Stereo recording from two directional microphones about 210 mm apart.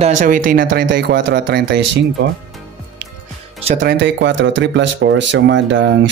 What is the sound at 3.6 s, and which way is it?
Speech, 40° right (ahead or behind).